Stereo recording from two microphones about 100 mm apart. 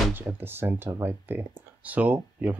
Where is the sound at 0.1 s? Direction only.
20° right (ahead or behind).